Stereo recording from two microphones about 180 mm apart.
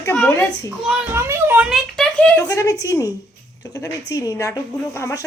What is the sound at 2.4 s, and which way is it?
A woman's voice, 20° left (ahead or behind).